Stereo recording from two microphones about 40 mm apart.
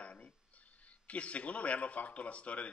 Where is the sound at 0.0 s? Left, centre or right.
Left.